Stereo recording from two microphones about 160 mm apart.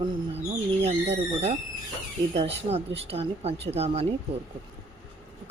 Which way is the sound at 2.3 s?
40° right (ahead or behind).